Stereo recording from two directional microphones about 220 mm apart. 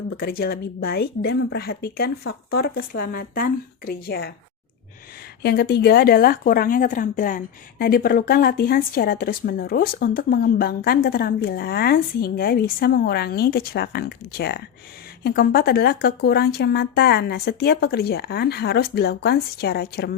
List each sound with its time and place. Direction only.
0.2 s speech: 45° left (ahead or behind)
5.4 s speech: 45° left (ahead or behind)